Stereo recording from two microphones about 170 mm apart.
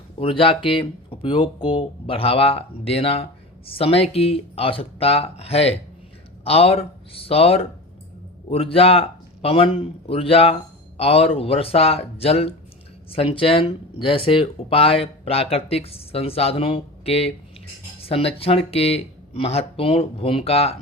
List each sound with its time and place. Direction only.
0.2 s speech: 30° left (ahead or behind)